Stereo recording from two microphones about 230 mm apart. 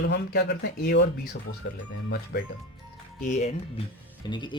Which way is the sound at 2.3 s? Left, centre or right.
Left.